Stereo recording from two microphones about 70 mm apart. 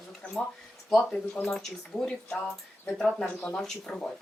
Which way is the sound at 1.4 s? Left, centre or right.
Centre.